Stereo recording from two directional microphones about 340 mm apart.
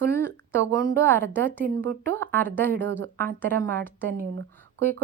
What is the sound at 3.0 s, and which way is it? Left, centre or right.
Speech, right.